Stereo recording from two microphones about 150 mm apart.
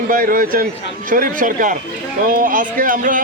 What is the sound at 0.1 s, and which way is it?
A man's voice, 70° right (ahead or behind).